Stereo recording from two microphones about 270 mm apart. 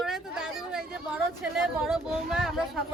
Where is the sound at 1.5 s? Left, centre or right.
Centre.